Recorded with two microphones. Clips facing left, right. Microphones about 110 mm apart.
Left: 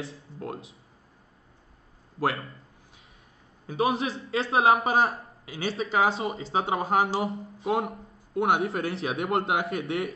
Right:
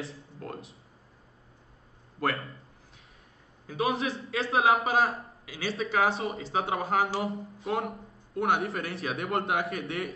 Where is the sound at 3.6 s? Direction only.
30° left (ahead or behind).